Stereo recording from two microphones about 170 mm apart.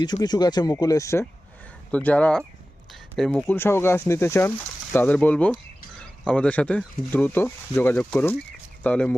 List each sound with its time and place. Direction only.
0.0 s speech: 25° left (ahead or behind); by 9.1 s 10° left (ahead or behind)